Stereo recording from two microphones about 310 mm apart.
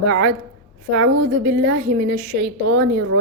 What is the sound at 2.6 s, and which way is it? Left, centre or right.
Speech, right.